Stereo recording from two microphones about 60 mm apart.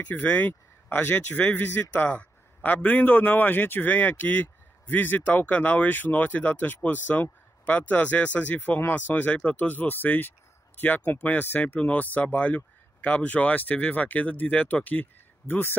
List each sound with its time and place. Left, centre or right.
0.0 s speech: left